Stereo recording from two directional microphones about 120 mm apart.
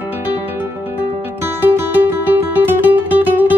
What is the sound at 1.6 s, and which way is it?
Music, 15° right (ahead or behind).